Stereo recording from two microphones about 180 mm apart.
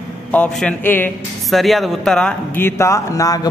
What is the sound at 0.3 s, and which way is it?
Speech, 5° left (ahead or behind).